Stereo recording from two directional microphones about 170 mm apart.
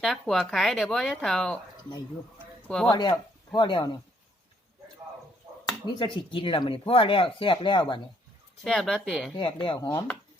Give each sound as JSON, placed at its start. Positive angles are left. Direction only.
{"t": 0.0, "sound": "speech", "side_deg": 0}
{"t": 2.6, "sound": "speech", "side_deg": 5}
{"t": 2.9, "sound": "speech", "side_deg": 25}
{"t": 5.8, "sound": "speech", "side_deg": 30}
{"t": 8.6, "sound": "speech", "side_deg": 0}
{"t": 9.6, "sound": "speech", "side_deg": 30}